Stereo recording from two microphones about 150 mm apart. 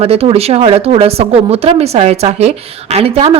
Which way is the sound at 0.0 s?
40° right (ahead or behind).